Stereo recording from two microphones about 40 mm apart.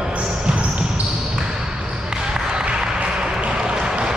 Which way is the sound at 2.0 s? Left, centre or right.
Centre.